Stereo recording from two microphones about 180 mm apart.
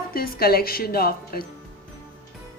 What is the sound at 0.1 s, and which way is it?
A woman's voice, 55° left (ahead or behind).